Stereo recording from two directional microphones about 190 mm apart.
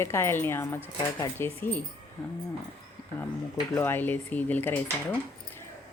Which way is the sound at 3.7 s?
10° left (ahead or behind).